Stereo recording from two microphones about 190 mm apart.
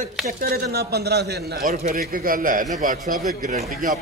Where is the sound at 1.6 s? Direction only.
45° right (ahead or behind).